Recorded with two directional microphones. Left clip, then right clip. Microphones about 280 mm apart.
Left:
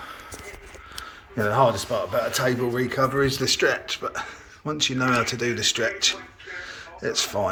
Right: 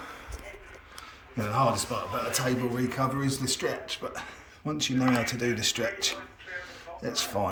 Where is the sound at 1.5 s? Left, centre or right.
Centre.